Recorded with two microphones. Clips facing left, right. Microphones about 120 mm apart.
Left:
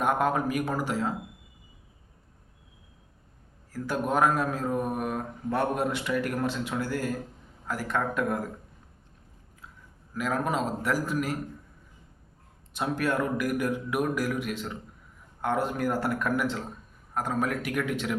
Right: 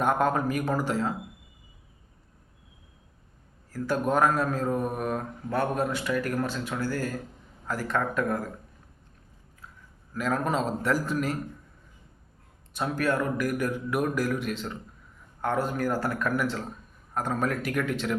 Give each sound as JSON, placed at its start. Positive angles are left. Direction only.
{"t": 0.0, "sound": "a man's voice", "side_deg": 10}
{"t": 3.7, "sound": "a man's voice", "side_deg": 15}
{"t": 10.2, "sound": "a man's voice", "side_deg": 10}
{"t": 12.7, "sound": "a man's voice", "side_deg": 20}